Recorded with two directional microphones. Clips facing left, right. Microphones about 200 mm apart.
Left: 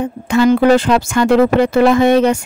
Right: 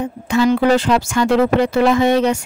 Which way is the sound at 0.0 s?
55° left (ahead or behind).